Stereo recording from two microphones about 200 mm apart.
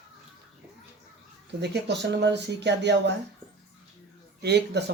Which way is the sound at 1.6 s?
60° right (ahead or behind).